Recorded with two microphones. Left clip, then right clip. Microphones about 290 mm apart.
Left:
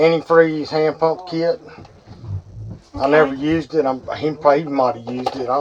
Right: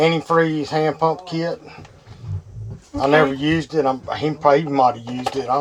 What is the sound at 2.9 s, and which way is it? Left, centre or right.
Speech, right.